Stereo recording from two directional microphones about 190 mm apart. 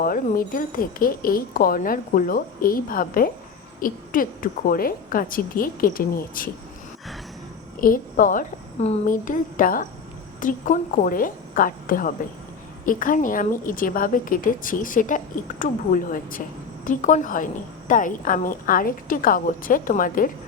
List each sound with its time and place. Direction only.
0.0 s a woman's voice: 50° left (ahead or behind)
3.8 s a sound: 45° left (ahead or behind)
4.7 s a woman's voice: 50° left (ahead or behind)
7.8 s a woman's voice: 45° left (ahead or behind)